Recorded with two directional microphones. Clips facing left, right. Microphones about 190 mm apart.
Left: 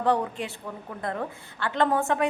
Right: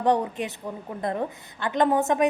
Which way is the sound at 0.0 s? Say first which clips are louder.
Right 2 dB; 20° right (ahead or behind).